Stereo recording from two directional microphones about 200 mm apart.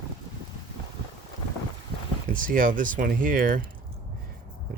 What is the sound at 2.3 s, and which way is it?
Speech, 45° right (ahead or behind).